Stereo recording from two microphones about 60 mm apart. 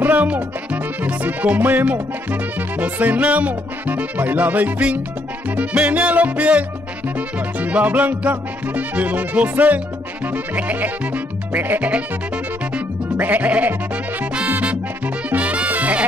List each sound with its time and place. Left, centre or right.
0.0 s music: right